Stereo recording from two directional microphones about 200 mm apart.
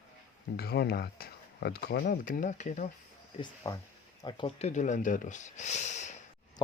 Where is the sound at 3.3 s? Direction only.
25° left (ahead or behind).